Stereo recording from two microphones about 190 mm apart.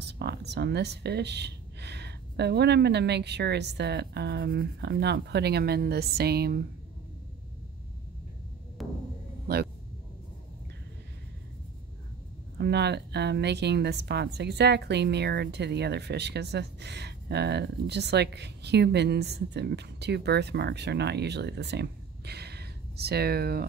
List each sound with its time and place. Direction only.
0.0 s speech: 60° right (ahead or behind)
8.8 s a sound: centre (ahead or behind)
12.5 s speech: 60° right (ahead or behind)